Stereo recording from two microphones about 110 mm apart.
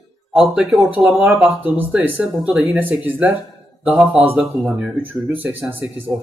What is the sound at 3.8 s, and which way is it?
Speech, 5° right (ahead or behind).